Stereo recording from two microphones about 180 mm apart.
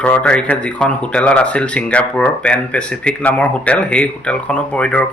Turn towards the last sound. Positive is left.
turn(degrees=5)  # may be behind; listen again after turning